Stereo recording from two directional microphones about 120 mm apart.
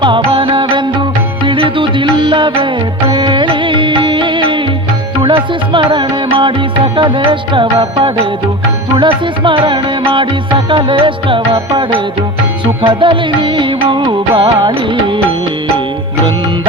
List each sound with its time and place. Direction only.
0.0 s music: 45° right (ahead or behind)